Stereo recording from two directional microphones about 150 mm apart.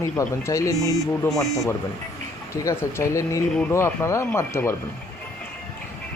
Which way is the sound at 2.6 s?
20° left (ahead or behind).